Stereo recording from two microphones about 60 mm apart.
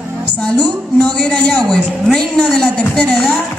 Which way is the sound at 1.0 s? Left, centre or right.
Centre.